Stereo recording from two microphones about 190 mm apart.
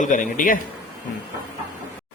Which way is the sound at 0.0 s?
40° left (ahead or behind).